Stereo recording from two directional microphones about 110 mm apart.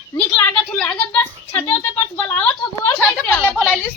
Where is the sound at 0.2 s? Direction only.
10° left (ahead or behind).